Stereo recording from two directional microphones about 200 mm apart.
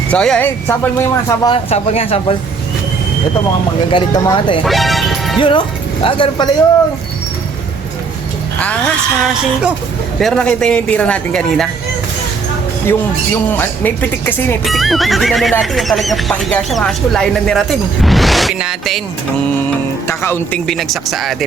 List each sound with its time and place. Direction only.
0.1 s speech: 5° left (ahead or behind)
1.5 s speech: 30° left (ahead or behind)
3.9 s speech: 25° left (ahead or behind)
4.6 s music: centre (ahead or behind)
5.4 s speech: 25° left (ahead or behind)
8.5 s speech: 5° left (ahead or behind)
12.8 s speech: 10° left (ahead or behind)
20.1 s speech: 10° left (ahead or behind)